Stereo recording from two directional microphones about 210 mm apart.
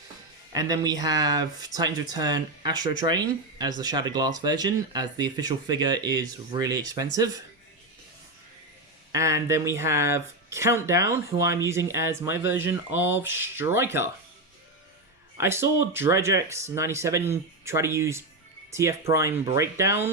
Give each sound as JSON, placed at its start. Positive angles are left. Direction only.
{"t": 0.5, "sound": "speech", "side_deg": -15}
{"t": 9.1, "sound": "speech", "side_deg": -15}
{"t": 15.4, "sound": "speech", "side_deg": -10}